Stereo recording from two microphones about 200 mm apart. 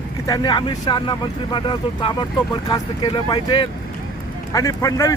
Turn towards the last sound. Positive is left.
turn(degrees=15)  # may be behind; listen again after turning